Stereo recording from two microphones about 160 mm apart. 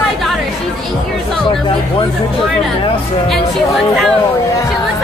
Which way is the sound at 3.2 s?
Centre (ahead or behind).